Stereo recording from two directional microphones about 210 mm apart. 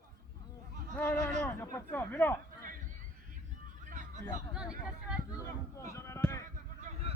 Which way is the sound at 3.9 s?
35° right (ahead or behind).